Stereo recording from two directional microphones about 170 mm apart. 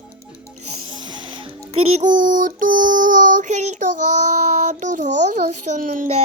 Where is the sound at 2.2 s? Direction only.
50° right (ahead or behind).